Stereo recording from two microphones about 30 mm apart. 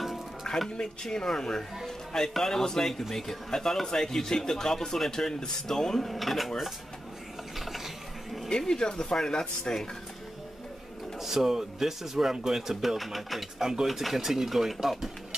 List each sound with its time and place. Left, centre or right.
0.0 s music: centre
1.0 s speech: centre
2.8 s speech: centre
6.0 s speech: centre
7.5 s mechanisms: centre
8.5 s speech: left
11.1 s speech: centre
12.9 s speech: centre
13.6 s speech: centre
13.8 s speech: centre